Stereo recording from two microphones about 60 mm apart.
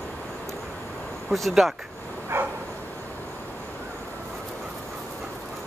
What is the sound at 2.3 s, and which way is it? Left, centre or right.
Dog, right.